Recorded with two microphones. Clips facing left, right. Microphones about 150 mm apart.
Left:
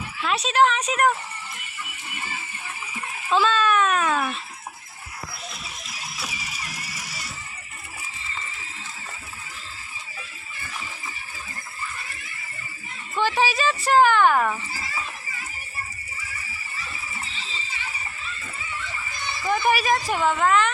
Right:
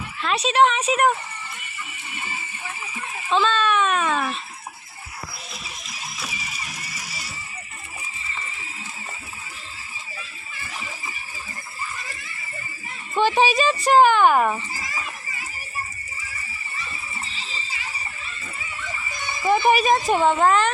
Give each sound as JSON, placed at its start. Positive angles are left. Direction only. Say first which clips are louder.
{"t": 0.2, "sound": "a child's voice", "louder": "right 2 dB", "side_deg": 0}
{"t": 3.2, "sound": "a child's voice", "louder": "even", "side_deg": 5}
{"t": 13.1, "sound": "speech", "louder": "right 4 dB", "side_deg": -20}
{"t": 19.4, "sound": "a woman's voice", "louder": "right 4 dB", "side_deg": -20}